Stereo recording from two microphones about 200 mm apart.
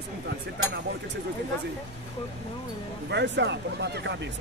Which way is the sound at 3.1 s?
60° right (ahead or behind).